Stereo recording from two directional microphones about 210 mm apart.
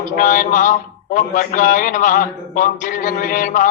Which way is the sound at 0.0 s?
40° left (ahead or behind).